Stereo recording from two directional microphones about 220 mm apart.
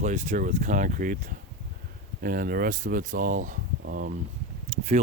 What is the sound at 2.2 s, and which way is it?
Speech, 40° right (ahead or behind).